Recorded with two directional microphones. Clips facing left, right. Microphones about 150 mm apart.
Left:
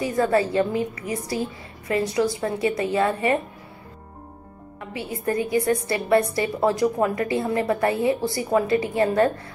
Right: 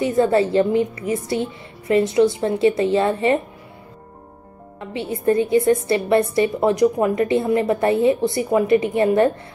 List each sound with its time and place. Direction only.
0.0 s a woman's voice: 25° right (ahead or behind)
4.7 s a woman's voice: 25° right (ahead or behind)